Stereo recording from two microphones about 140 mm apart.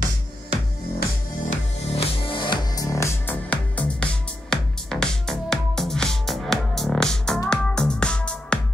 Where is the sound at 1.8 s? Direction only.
45° left (ahead or behind).